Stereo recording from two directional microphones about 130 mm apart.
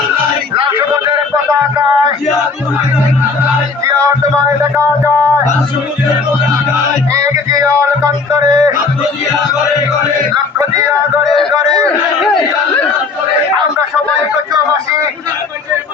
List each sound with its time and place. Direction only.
0.5 s a sound: 40° right (ahead or behind)
7.1 s music: 25° right (ahead or behind)
11.7 s crowd: 5° left (ahead or behind)